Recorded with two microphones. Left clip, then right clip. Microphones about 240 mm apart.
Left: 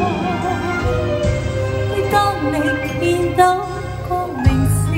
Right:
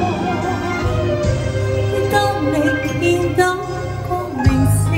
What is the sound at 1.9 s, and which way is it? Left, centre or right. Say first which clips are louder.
Music: left 1 dB; centre.